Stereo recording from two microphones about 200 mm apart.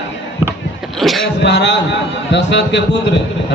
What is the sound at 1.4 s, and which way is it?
A man's voice, 60° left (ahead or behind).